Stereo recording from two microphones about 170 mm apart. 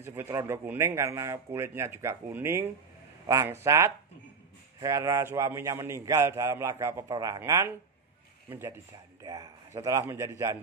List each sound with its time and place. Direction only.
0.0 s a man's voice: 15° right (ahead or behind)